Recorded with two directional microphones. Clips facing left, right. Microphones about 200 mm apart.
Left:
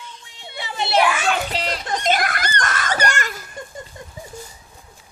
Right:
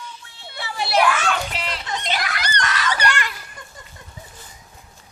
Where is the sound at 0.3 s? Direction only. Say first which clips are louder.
Left 2 dB; 15° left (ahead or behind).